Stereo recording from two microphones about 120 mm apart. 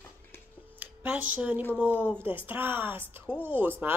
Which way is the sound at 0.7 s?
10° right (ahead or behind).